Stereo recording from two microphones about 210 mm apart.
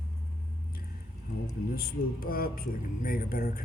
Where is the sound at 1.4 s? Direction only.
45° left (ahead or behind).